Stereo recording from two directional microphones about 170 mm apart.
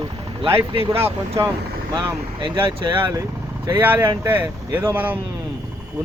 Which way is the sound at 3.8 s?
10° right (ahead or behind).